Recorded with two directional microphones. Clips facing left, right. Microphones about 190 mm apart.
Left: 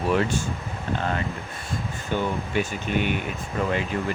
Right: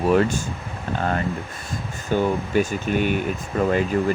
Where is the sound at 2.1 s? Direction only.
40° right (ahead or behind).